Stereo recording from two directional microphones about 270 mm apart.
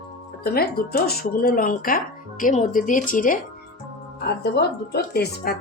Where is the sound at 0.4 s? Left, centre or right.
Left.